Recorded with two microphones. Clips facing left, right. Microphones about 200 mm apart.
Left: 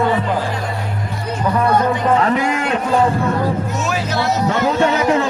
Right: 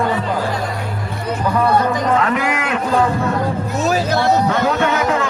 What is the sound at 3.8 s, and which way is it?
Speech, 40° right (ahead or behind).